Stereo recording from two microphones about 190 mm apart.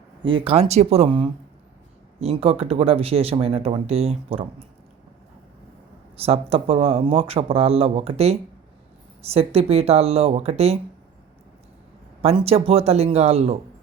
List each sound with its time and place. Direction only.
0.2 s speech: 25° right (ahead or behind)
6.1 s speech: 30° right (ahead or behind)
12.2 s speech: 30° right (ahead or behind)